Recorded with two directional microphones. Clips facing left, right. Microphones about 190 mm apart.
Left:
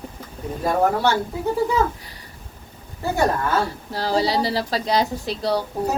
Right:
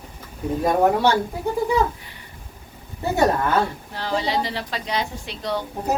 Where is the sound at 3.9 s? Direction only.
35° left (ahead or behind).